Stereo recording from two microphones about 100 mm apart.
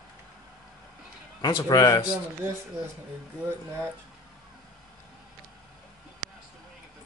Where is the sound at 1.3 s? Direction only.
45° left (ahead or behind).